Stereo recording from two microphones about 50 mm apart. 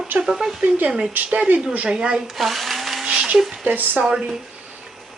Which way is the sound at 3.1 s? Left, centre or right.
Centre.